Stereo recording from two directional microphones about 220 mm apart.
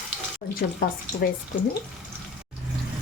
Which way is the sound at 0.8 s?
40° left (ahead or behind).